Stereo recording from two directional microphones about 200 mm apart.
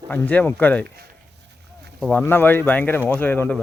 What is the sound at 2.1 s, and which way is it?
Speech, 10° left (ahead or behind).